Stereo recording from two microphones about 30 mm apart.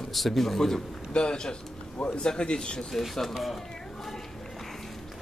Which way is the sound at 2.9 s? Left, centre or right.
Centre.